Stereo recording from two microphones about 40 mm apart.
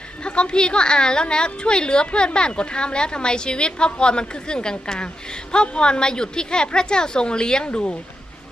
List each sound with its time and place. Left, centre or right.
0.3 s a woman's voice: left